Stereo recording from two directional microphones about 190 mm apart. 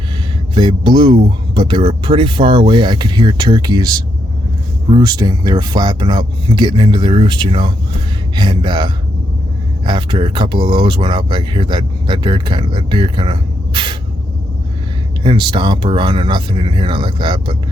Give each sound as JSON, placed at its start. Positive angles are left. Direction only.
{"t": 0.5, "sound": "speech", "side_deg": -25}
{"t": 15.2, "sound": "speech", "side_deg": -25}